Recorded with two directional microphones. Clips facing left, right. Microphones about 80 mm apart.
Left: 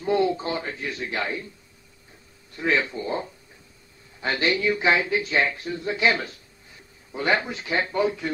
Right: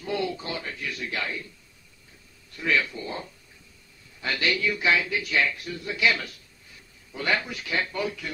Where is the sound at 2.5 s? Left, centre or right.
Left.